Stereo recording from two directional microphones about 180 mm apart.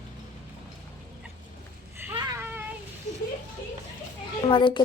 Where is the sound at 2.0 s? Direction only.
10° right (ahead or behind).